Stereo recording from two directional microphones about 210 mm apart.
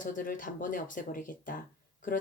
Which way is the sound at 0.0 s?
40° left (ahead or behind).